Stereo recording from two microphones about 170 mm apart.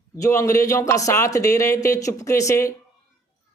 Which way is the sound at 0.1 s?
20° left (ahead or behind).